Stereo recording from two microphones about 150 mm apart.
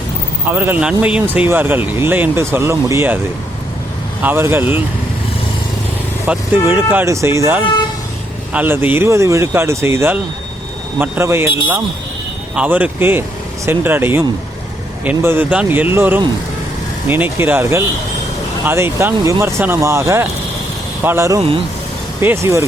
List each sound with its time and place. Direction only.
0.4 s speech: 10° right (ahead or behind)
4.2 s speech: 15° right (ahead or behind)
6.2 s speech: 15° right (ahead or behind)
12.5 s speech: 10° right (ahead or behind)